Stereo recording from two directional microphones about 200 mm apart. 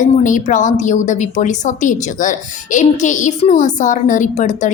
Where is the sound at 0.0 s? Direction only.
40° left (ahead or behind).